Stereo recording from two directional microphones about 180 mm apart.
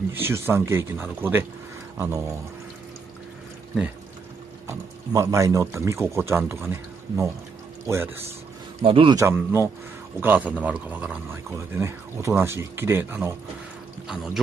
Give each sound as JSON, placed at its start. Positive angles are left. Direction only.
{"t": 0.1, "sound": "speech", "side_deg": -15}
{"t": 4.6, "sound": "speech", "side_deg": -15}
{"t": 8.8, "sound": "a man's voice", "side_deg": -30}
{"t": 9.2, "sound": "speech", "side_deg": -15}
{"t": 14.0, "sound": "speech", "side_deg": 0}